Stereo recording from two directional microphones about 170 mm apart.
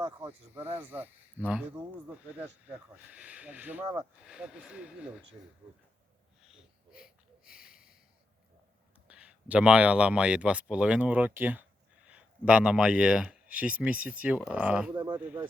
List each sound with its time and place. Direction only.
0.2 s speech: 10° right (ahead or behind)
6.4 s sniff: 5° right (ahead or behind)
9.0 s speech: 5° right (ahead or behind)
14.9 s speech: 25° right (ahead or behind)
15.2 s speech: 10° right (ahead or behind)